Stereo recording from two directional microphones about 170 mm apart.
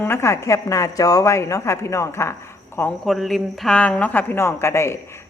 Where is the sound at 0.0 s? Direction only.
15° left (ahead or behind).